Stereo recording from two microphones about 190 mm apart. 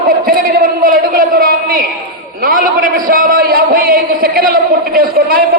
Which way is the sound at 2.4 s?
50° right (ahead or behind).